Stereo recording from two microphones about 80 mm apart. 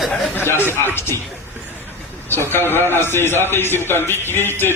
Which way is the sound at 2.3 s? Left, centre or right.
Left.